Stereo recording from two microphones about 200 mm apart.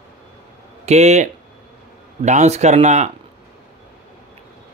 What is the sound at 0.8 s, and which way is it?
A man's voice, 35° right (ahead or behind).